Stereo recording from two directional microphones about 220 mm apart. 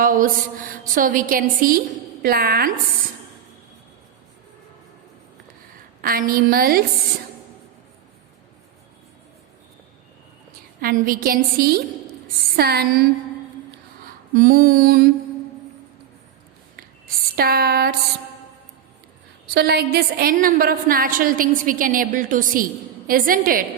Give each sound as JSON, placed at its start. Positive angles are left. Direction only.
{"t": 0.0, "sound": "a woman's voice", "side_deg": -40}
{"t": 6.0, "sound": "a woman's voice", "side_deg": -40}
{"t": 10.8, "sound": "a woman's voice", "side_deg": -40}
{"t": 14.3, "sound": "a woman's voice", "side_deg": -40}
{"t": 16.7, "sound": "a sound", "side_deg": -45}
{"t": 19.5, "sound": "a woman's voice", "side_deg": -45}